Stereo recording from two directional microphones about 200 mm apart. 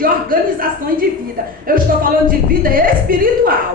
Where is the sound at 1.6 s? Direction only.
45° right (ahead or behind).